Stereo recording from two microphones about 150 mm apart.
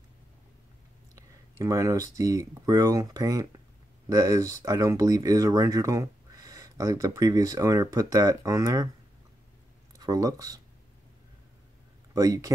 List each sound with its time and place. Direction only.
1.1 s a sound: 20° right (ahead or behind)
2.1 s speech: 20° right (ahead or behind)
9.9 s speech: 25° right (ahead or behind)
12.1 s speech: 20° right (ahead or behind)